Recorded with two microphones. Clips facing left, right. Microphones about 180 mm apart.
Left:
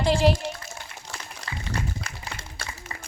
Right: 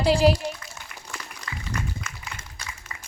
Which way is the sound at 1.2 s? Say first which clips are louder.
Even; 30° left (ahead or behind).